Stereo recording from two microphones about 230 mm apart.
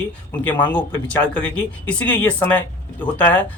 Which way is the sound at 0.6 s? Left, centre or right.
Centre.